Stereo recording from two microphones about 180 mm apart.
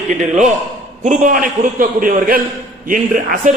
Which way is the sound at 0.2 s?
40° right (ahead or behind).